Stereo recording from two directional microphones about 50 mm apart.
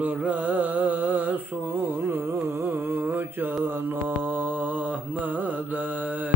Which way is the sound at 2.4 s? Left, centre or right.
Right.